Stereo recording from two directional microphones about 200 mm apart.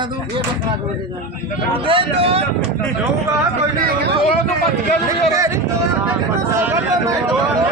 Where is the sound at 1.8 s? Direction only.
25° right (ahead or behind).